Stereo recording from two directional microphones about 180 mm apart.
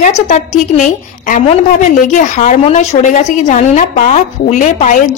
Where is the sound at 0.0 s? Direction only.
40° left (ahead or behind).